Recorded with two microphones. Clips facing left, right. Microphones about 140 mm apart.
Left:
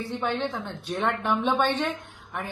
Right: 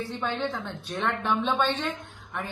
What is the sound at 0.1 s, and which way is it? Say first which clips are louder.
A man's voice: left 5 dB; 15° left (ahead or behind).